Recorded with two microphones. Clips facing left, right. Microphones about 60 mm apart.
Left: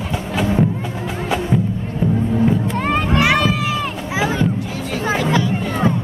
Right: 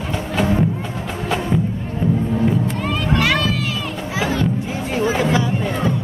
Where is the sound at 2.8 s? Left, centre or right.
Left.